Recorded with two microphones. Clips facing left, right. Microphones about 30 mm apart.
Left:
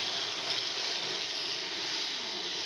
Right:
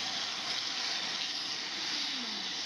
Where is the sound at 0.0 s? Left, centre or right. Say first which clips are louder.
Left 2 dB; left.